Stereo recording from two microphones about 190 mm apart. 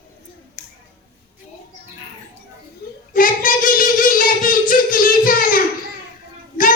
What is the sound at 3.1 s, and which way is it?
Child singing, 45° left (ahead or behind).